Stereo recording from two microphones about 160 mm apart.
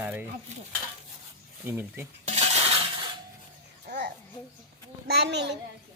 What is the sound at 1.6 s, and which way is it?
Speech, 15° right (ahead or behind).